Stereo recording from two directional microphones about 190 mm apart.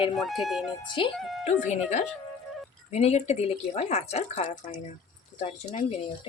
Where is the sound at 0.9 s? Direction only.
25° left (ahead or behind).